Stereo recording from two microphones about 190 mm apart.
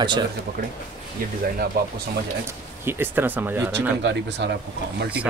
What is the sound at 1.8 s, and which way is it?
Speech, 55° right (ahead or behind).